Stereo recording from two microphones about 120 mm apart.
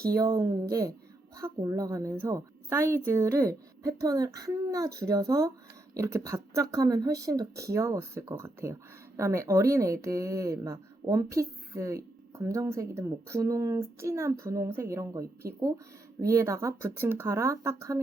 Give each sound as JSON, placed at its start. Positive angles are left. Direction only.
{"t": 0.1, "sound": "speech", "side_deg": -30}
{"t": 16.2, "sound": "speech", "side_deg": -25}